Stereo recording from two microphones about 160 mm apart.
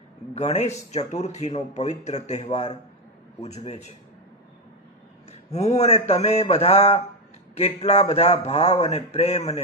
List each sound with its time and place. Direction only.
0.3 s speech: 45° left (ahead or behind)
5.3 s speech: 40° left (ahead or behind)